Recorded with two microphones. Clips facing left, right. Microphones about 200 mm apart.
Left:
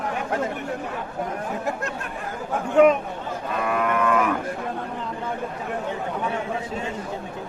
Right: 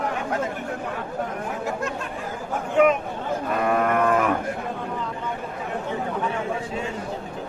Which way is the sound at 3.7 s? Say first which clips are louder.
Right 1 dB; 40° right (ahead or behind).